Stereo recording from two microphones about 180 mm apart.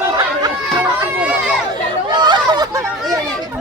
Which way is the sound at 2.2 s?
25° right (ahead or behind).